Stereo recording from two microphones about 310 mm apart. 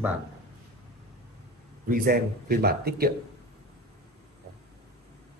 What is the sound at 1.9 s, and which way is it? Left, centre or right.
Speech, right.